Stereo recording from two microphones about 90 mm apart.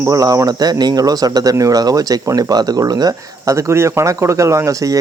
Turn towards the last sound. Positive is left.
turn(degrees=-40)  # may be behind; listen again after turning